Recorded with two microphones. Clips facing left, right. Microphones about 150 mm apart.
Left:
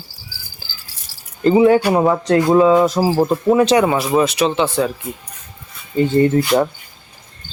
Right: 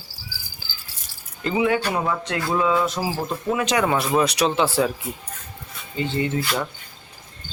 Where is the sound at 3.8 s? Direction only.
5° left (ahead or behind).